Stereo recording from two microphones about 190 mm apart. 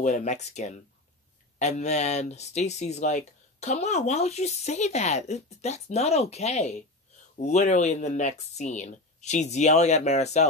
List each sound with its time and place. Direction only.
0.0 s speech: 40° left (ahead or behind)